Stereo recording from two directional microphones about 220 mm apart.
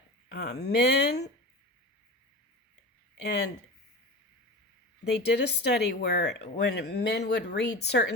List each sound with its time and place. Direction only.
0.3 s speech: 50° left (ahead or behind)
3.2 s speech: 50° left (ahead or behind)
5.0 s speech: 50° left (ahead or behind)